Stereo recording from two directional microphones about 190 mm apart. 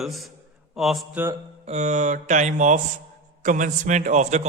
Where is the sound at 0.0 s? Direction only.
Centre (ahead or behind).